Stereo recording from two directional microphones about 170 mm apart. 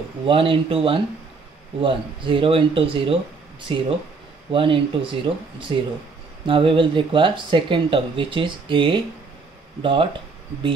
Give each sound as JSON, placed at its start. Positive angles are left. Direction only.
{"t": 0.3, "sound": "speech", "side_deg": -30}